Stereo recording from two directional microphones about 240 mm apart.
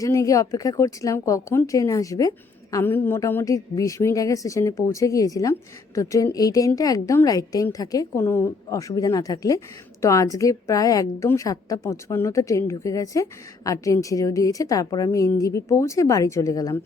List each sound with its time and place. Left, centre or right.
0.0 s a woman's voice: centre